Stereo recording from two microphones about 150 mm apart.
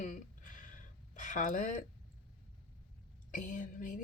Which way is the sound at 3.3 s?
60° left (ahead or behind).